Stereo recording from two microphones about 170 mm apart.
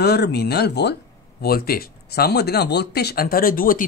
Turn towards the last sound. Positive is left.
turn(degrees=55)  # may be behind; listen again after turning